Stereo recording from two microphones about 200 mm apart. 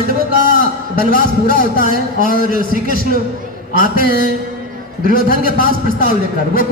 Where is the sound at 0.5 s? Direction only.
45° left (ahead or behind).